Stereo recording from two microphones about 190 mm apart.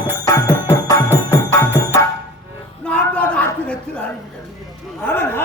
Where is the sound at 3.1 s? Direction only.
5° left (ahead or behind).